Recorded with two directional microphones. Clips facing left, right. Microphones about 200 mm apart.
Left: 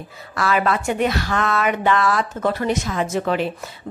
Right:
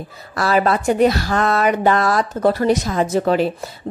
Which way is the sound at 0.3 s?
35° right (ahead or behind).